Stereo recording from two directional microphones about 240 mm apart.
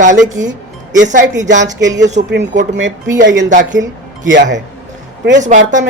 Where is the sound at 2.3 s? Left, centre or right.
Right.